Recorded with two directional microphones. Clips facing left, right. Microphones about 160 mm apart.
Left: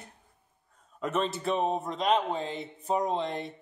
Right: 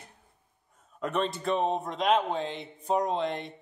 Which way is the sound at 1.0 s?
Centre (ahead or behind).